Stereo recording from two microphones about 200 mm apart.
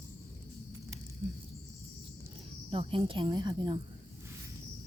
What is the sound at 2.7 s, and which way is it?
A woman's voice, 25° right (ahead or behind).